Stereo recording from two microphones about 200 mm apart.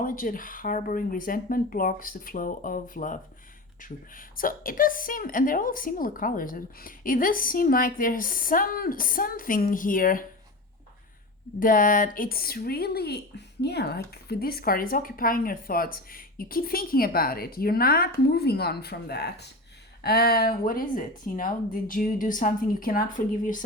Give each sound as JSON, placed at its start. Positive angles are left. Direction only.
{"t": 0.0, "sound": "a woman's voice", "side_deg": 45}
{"t": 11.6, "sound": "a woman's voice", "side_deg": 45}